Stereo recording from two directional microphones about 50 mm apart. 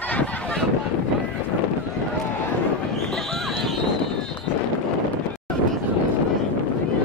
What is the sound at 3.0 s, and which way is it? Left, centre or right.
Horse, centre.